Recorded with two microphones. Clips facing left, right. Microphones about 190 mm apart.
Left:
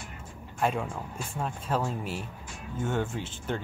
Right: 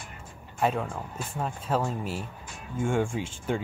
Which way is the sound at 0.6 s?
5° right (ahead or behind).